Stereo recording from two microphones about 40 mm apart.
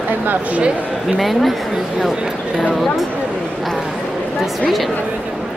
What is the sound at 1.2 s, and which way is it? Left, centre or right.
Speech, centre.